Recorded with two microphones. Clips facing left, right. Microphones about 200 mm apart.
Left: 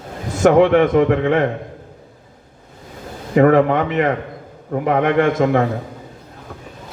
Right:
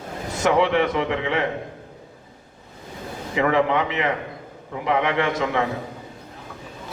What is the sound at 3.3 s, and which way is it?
A man's voice, 50° left (ahead or behind).